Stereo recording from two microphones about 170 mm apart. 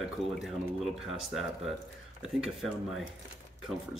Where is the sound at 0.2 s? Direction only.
Centre (ahead or behind).